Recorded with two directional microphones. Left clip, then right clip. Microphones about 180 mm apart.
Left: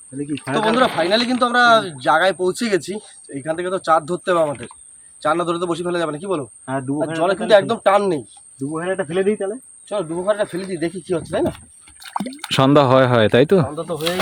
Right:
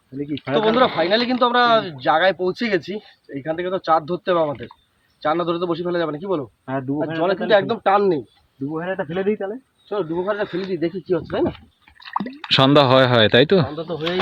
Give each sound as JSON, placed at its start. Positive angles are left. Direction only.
{"t": 0.1, "sound": "a man's voice", "side_deg": -35}
{"t": 7.9, "sound": "speech", "side_deg": 20}
{"t": 12.0, "sound": "speech", "side_deg": 35}
{"t": 12.5, "sound": "speech", "side_deg": 5}
{"t": 13.7, "sound": "speech", "side_deg": 25}